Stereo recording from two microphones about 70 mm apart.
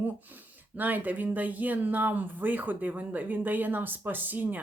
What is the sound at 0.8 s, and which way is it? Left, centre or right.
Speech, right.